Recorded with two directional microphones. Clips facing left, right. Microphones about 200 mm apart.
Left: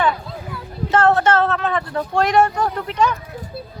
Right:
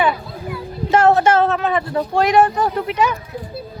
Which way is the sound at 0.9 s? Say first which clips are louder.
Right 2 dB; 10° right (ahead or behind).